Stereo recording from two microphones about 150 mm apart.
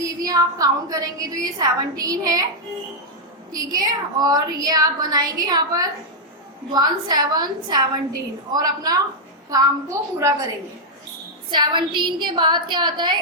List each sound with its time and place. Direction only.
0.0 s a woman's voice: 25° right (ahead or behind)
3.5 s a woman's voice: 25° right (ahead or behind)
11.5 s a woman's voice: 30° right (ahead or behind)